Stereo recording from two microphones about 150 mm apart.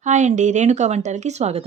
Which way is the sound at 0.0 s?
50° right (ahead or behind).